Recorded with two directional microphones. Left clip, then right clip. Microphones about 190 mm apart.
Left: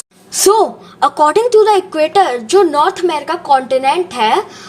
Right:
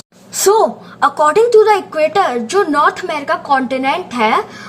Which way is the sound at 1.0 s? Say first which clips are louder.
Even; 35° left (ahead or behind).